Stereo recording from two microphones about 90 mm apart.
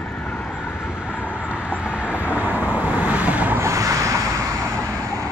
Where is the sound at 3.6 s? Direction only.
35° right (ahead or behind).